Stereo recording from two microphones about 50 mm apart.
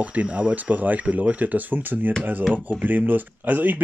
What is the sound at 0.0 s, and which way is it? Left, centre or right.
Speech, right.